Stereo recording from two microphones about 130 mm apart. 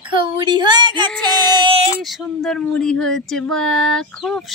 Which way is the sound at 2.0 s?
Centre (ahead or behind).